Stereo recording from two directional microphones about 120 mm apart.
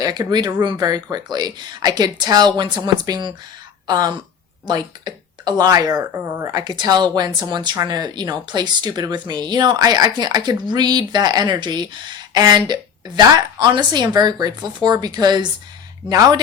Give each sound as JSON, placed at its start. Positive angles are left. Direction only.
{"t": 0.0, "sound": "speech", "side_deg": -35}